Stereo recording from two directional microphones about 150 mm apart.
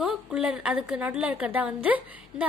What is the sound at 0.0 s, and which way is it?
A woman's voice, 5° right (ahead or behind).